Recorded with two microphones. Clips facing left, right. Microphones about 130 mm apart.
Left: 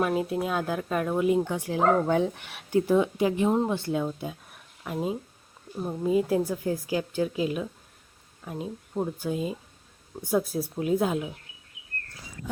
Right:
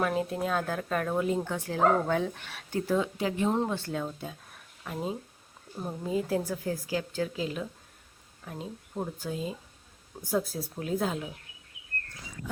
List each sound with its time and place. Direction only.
0.0 s speech: 10° left (ahead or behind)